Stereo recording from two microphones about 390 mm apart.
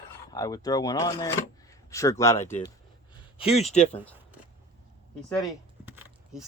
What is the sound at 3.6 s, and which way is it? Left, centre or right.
Speech, centre.